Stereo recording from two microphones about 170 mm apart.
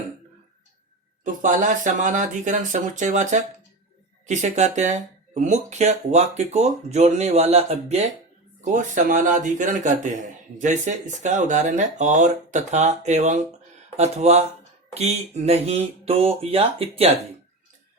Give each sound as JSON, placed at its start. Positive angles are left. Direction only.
{"t": 1.2, "sound": "speech", "side_deg": -50}
{"t": 8.6, "sound": "speech", "side_deg": -50}